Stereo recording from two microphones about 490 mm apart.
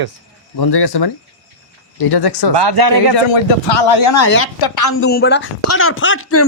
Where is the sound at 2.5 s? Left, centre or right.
Right.